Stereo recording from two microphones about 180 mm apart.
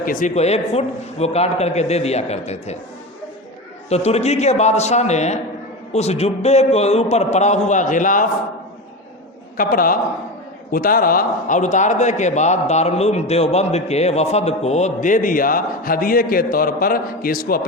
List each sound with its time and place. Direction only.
0.0 s speech: 45° left (ahead or behind)
3.8 s speech: 35° left (ahead or behind)
9.6 s a man's voice: 50° left (ahead or behind)